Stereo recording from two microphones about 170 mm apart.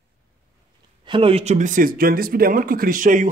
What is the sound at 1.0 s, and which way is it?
Speech, 30° right (ahead or behind).